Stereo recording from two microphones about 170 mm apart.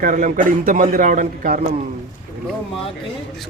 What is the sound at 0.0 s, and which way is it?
A man's voice, 50° right (ahead or behind).